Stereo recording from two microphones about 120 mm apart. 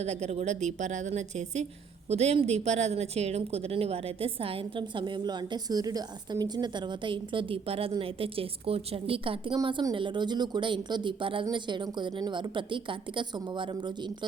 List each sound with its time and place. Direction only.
0.0 s a woman's voice: 65° right (ahead or behind)
2.0 s a woman's voice: 60° right (ahead or behind); by 14.3 s 40° right (ahead or behind)